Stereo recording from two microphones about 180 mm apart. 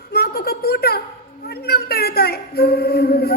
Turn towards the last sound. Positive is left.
turn(degrees=60)  # may be behind; listen again after turning